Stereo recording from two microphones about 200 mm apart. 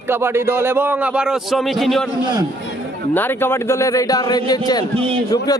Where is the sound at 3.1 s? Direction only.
10° left (ahead or behind).